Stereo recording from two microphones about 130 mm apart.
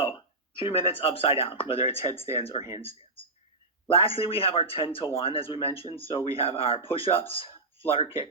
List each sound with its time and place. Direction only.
0.5 s speech: 45° left (ahead or behind)
3.8 s speech: 45° left (ahead or behind)